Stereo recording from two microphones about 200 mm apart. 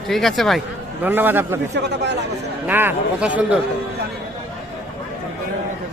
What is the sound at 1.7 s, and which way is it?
Speech, 60° right (ahead or behind).